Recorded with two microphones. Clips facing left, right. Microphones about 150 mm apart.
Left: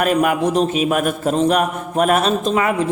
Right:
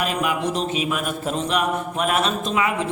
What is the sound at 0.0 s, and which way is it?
A man's voice, 50° left (ahead or behind).